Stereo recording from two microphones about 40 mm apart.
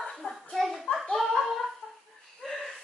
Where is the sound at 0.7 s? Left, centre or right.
Centre.